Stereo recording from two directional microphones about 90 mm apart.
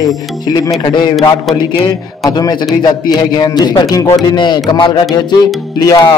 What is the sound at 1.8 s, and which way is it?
Speech, 45° left (ahead or behind).